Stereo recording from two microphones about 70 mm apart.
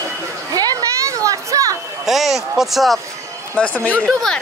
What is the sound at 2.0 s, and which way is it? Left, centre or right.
Speech, centre.